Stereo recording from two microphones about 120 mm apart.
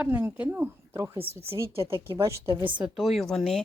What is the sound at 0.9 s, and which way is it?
Speech, 25° right (ahead or behind).